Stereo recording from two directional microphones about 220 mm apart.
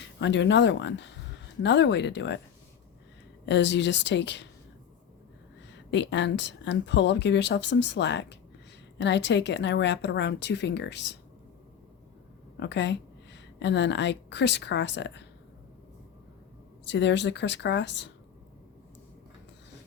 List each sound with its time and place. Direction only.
0.0 s speech: 55° left (ahead or behind)
3.4 s speech: 55° left (ahead or behind)
5.9 s speech: 55° left (ahead or behind)
12.5 s a woman's voice: 55° left (ahead or behind)
16.8 s speech: 55° left (ahead or behind)